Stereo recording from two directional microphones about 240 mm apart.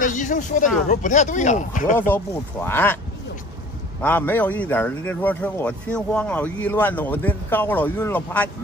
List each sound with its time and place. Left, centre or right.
0.0 s speech: left
2.0 s speech: centre
4.0 s speech: centre